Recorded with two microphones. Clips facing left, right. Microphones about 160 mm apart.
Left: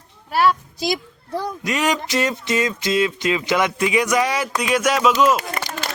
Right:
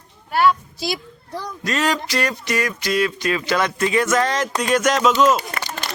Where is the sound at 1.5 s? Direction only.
20° left (ahead or behind).